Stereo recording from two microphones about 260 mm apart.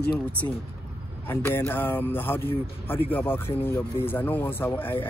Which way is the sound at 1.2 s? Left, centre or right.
Centre.